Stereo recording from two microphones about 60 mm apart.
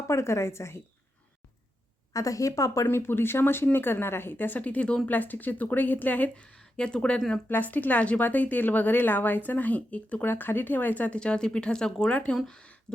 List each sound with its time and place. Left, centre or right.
0.1 s a woman's voice: left
2.1 s a woman's voice: left
2.8 s speech: left; by 7.2 s centre
7.4 s speech: left; by 12.0 s centre
12.0 s speech: left